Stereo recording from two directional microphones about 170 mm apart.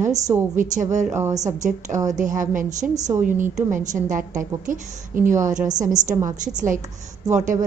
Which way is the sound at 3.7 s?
50° right (ahead or behind).